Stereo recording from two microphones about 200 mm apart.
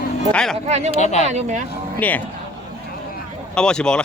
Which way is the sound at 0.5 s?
30° right (ahead or behind).